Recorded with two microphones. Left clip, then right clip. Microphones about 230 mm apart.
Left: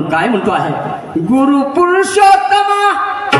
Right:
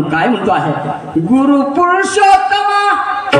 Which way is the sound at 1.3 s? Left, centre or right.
Left.